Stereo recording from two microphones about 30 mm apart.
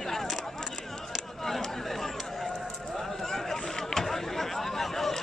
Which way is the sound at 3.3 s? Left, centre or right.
Centre.